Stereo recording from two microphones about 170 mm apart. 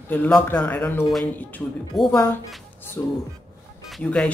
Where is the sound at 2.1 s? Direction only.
15° left (ahead or behind).